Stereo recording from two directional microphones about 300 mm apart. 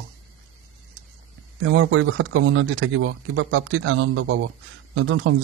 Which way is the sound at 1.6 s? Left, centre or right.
Right.